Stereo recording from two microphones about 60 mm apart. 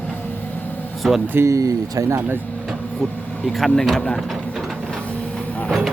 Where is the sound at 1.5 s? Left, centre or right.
Right.